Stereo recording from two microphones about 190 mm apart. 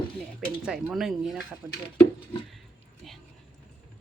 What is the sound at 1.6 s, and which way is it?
Speech, 15° right (ahead or behind).